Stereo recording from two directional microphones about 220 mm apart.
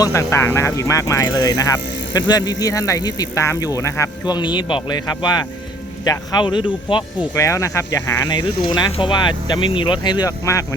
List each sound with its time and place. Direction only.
0.0 s speech: 15° left (ahead or behind)